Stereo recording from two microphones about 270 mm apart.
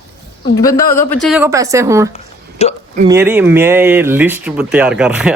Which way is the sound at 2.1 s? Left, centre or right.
Left.